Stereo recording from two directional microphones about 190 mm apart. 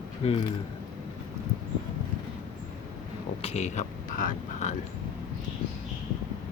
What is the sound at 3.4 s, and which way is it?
Speech, 35° left (ahead or behind).